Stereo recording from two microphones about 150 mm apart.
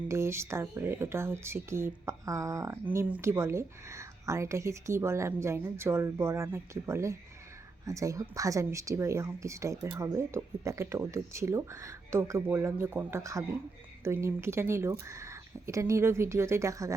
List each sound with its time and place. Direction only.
0.1 s a woman's voice: 15° right (ahead or behind)